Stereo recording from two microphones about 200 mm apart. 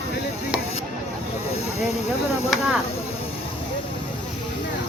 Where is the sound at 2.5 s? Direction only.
Centre (ahead or behind).